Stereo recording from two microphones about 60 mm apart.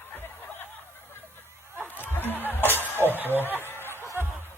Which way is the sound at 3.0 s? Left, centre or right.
Right.